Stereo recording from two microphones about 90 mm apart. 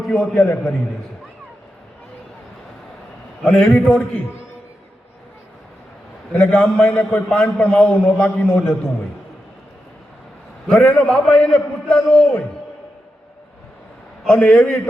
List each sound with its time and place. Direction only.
0.0 s a man's voice: centre (ahead or behind)
0.3 s a man's voice: 25° left (ahead or behind)
3.4 s a man's voice: 5° left (ahead or behind)
6.3 s a man's voice: 10° left (ahead or behind)
8.0 s a man's voice: 20° left (ahead or behind)
8.4 s a man's voice: 5° left (ahead or behind)
10.7 s a man's voice: 10° left (ahead or behind)
14.3 s a man's voice: 10° left (ahead or behind)